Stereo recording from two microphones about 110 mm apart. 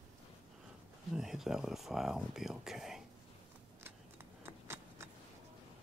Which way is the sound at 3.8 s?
20° right (ahead or behind).